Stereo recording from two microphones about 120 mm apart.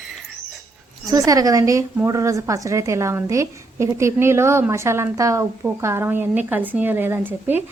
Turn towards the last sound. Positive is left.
turn(degrees=-15)  # may be behind; listen again after turning